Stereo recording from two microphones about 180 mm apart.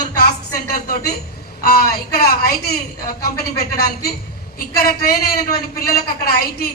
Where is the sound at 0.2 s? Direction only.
55° left (ahead or behind).